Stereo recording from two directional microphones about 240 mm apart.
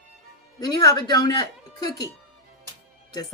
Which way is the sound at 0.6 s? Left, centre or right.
Centre.